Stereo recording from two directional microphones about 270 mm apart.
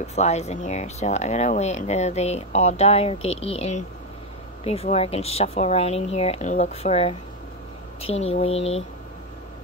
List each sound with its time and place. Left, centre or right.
0.0 s speech: left